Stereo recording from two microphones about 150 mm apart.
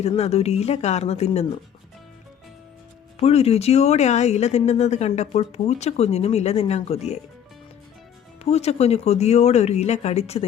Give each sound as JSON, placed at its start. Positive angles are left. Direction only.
{"t": 0.0, "sound": "speech", "side_deg": 45}
{"t": 3.2, "sound": "speech", "side_deg": 45}
{"t": 8.4, "sound": "speech", "side_deg": 45}